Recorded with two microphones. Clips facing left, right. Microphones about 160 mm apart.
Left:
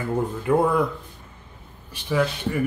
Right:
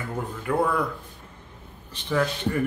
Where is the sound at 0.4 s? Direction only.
20° left (ahead or behind).